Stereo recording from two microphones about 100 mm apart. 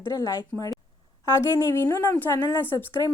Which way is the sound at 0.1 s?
35° left (ahead or behind).